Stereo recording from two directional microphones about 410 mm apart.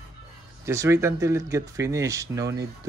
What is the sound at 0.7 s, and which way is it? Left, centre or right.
Speech, centre.